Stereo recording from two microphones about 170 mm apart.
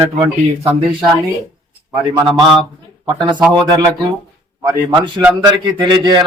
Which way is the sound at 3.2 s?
25° right (ahead or behind).